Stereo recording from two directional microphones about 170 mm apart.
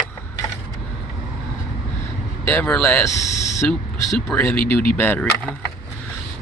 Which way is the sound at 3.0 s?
20° left (ahead or behind).